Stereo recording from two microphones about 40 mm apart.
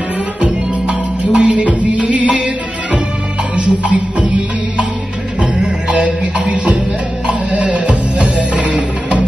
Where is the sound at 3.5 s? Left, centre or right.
Right.